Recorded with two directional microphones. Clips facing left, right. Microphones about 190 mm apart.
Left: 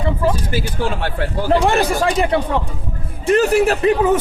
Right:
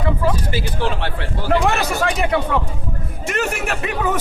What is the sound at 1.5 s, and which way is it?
Speech, 30° left (ahead or behind).